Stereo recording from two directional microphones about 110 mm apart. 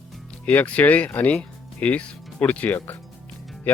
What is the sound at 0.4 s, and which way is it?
Speech, 10° left (ahead or behind).